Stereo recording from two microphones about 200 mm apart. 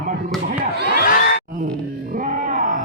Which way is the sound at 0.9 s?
50° left (ahead or behind).